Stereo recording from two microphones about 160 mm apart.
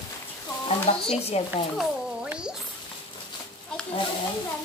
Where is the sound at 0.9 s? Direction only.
40° left (ahead or behind).